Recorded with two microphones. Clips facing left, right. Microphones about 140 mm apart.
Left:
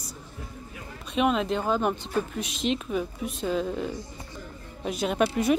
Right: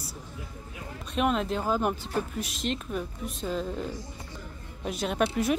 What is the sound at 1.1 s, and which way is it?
Speech, centre (ahead or behind).